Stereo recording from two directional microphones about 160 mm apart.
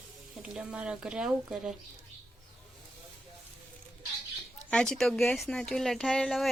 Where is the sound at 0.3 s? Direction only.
5° right (ahead or behind).